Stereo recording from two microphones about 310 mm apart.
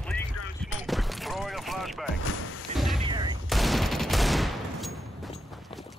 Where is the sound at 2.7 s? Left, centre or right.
Centre.